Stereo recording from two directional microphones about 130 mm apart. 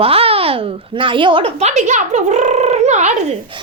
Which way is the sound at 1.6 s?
65° right (ahead or behind).